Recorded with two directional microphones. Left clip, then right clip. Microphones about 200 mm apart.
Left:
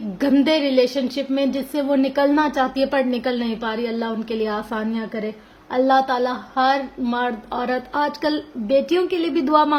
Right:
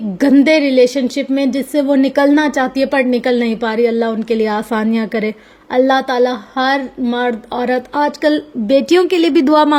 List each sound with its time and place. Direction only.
0.2 s a woman's voice: 35° right (ahead or behind)